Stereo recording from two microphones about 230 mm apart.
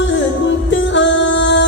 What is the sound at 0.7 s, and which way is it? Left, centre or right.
Music, left.